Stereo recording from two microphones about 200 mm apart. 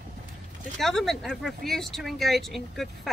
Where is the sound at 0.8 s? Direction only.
Centre (ahead or behind).